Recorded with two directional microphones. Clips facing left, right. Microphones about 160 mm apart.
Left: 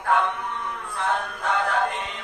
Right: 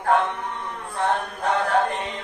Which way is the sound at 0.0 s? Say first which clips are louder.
Right 2 dB; 40° right (ahead or behind).